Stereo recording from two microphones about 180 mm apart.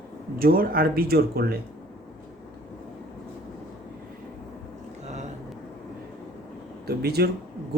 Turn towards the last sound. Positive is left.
turn(degrees=-60)  # may be behind; listen again after turning